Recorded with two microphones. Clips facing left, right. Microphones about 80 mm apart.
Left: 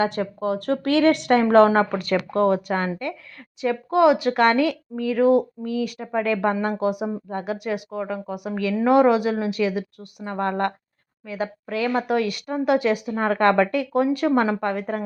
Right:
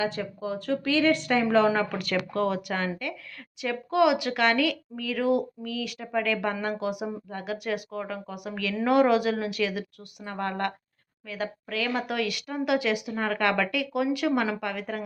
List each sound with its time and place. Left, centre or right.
0.0 s a woman's voice: left
1.9 s speech: left
10.3 s speech: centre; by 15.0 s left